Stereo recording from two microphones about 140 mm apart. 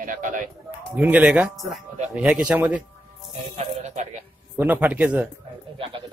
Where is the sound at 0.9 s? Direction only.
10° right (ahead or behind).